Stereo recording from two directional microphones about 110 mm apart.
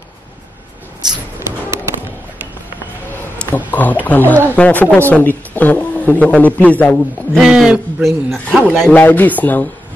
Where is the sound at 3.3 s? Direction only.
15° left (ahead or behind).